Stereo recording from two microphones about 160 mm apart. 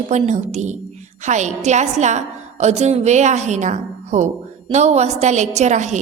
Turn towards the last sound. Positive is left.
turn(degrees=-50)  # may be behind; listen again after turning